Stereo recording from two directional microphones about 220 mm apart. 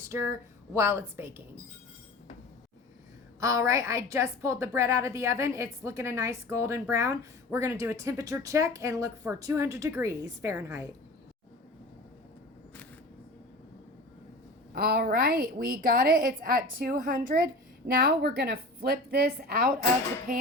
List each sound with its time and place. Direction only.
0.0 s a sound: 10° right (ahead or behind)
0.8 s a woman's voice: 10° right (ahead or behind)
3.4 s a woman's voice: 15° right (ahead or behind)
14.7 s a woman's voice: 45° right (ahead or behind)